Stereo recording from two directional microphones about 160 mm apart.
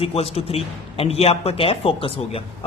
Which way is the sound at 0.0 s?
35° left (ahead or behind).